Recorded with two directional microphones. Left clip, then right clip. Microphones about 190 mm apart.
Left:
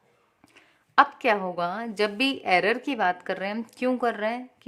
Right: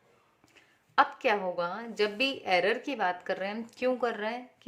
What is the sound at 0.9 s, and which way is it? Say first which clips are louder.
A woman's voice: left 5 dB; 25° left (ahead or behind).